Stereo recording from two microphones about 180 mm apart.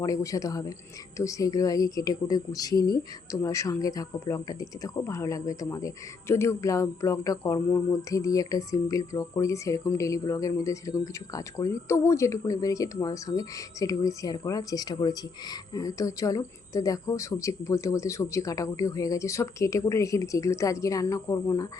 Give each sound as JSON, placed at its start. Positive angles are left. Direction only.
{"t": 0.0, "sound": "speech", "side_deg": 20}